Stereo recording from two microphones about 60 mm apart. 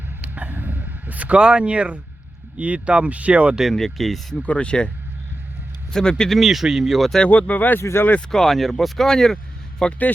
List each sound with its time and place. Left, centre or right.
0.2 s a sound: right
2.6 s speech: right
3.6 s speech: centre
4.4 s speech: centre
5.9 s speech: centre
7.3 s speech: left
7.8 s speech: left
8.3 s speech: centre